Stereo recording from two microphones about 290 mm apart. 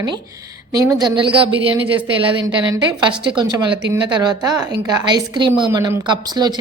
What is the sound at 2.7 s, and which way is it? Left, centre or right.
A man's voice, centre.